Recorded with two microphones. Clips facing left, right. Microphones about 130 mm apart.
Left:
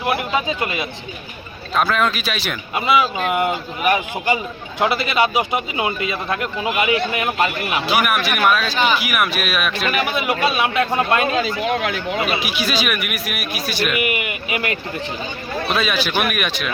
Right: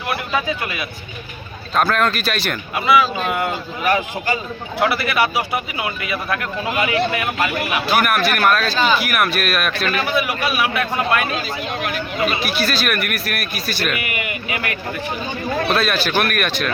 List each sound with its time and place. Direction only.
0.0 s a man's voice: 20° left (ahead or behind)
1.7 s speech: centre (ahead or behind)
2.7 s a man's voice: 20° left (ahead or behind)
7.9 s a man's voice: centre (ahead or behind); by 11.3 s 25° left (ahead or behind)
11.3 s speech: 90° left
12.4 s speech: 5° left (ahead or behind)
13.9 s speech: 20° left (ahead or behind)
15.7 s speech: centre (ahead or behind)
16.1 s speech: 10° left (ahead or behind)